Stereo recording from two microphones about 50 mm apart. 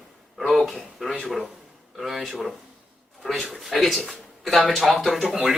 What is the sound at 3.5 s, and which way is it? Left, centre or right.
Speech, centre.